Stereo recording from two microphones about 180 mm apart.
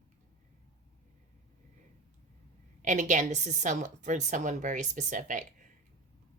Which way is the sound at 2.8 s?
45° right (ahead or behind).